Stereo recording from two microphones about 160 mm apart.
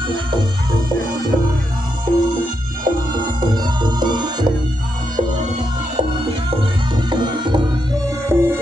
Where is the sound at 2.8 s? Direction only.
25° right (ahead or behind).